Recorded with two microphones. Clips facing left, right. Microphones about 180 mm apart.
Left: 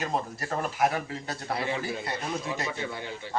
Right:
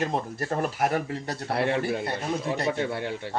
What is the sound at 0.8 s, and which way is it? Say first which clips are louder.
Speech: left 1 dB; 50° right (ahead or behind).